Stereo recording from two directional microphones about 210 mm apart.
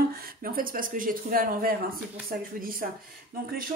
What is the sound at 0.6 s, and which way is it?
Speech, 40° right (ahead or behind).